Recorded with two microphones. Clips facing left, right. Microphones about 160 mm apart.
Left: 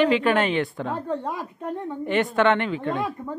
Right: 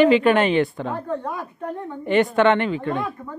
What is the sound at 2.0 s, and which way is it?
Speech, centre (ahead or behind).